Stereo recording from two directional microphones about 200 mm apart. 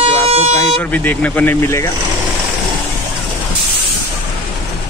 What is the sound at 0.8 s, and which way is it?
A man's voice, 10° left (ahead or behind).